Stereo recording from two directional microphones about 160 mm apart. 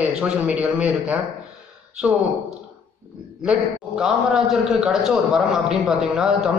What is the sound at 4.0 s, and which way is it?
A man's voice, 5° right (ahead or behind).